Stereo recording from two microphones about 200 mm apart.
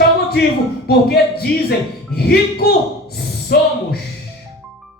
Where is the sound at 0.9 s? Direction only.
50° left (ahead or behind).